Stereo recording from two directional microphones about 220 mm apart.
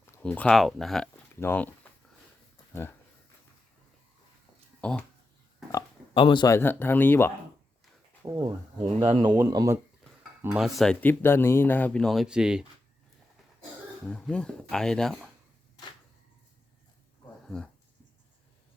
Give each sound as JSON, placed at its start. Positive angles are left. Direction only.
{"t": 0.1, "sound": "speech", "side_deg": 5}
{"t": 4.8, "sound": "speech", "side_deg": 5}
{"t": 5.7, "sound": "speech", "side_deg": 20}
{"t": 8.2, "sound": "speech", "side_deg": -20}
{"t": 10.4, "sound": "speech", "side_deg": -5}
{"t": 14.1, "sound": "speech", "side_deg": 5}
{"t": 17.4, "sound": "a sound", "side_deg": 5}